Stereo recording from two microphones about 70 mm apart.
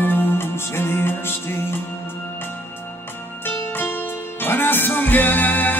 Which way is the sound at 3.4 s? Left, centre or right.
Left.